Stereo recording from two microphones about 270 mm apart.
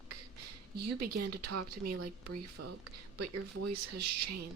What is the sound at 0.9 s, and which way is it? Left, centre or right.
Speech, right.